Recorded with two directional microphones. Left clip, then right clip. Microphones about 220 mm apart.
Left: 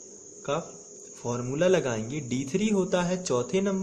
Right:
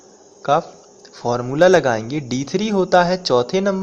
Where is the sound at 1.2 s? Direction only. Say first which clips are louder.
Right 12 dB; 10° right (ahead or behind).